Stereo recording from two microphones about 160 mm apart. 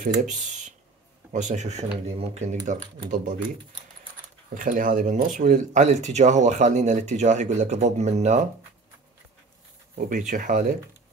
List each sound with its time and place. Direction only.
1.3 s speech: 50° right (ahead or behind)
3.1 s speech: 55° right (ahead or behind)
4.6 s speech: 60° right (ahead or behind)
9.9 s speech: 55° right (ahead or behind)